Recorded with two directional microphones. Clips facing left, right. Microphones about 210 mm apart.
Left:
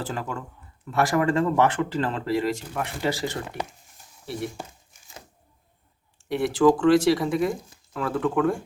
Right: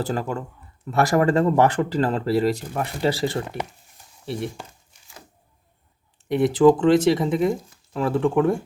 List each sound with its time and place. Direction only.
0.0 s speech: 40° right (ahead or behind)
6.2 s speech: 20° right (ahead or behind)